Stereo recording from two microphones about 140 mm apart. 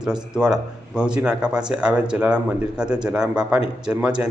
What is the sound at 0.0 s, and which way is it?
A man's voice, 5° right (ahead or behind).